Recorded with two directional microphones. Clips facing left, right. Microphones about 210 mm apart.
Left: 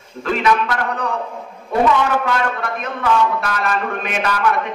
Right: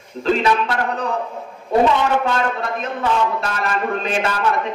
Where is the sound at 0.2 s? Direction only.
30° right (ahead or behind).